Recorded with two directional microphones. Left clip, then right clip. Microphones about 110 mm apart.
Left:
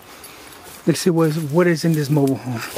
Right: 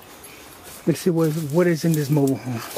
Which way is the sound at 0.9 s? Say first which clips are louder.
Left 3 dB; 25° left (ahead or behind).